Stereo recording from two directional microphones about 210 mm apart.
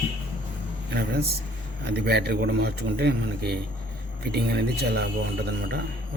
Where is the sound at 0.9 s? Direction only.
50° right (ahead or behind).